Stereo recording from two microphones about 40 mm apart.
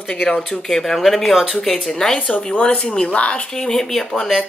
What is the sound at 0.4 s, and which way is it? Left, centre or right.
Speech, centre.